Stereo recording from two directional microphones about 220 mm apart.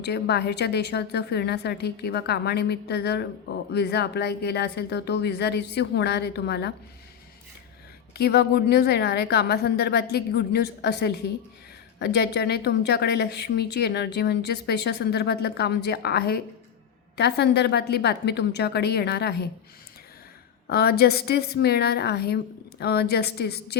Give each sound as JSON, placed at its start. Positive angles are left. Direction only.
{"t": 0.0, "sound": "speech", "side_deg": 50}
{"t": 8.1, "sound": "speech", "side_deg": 45}
{"t": 20.7, "sound": "speech", "side_deg": 45}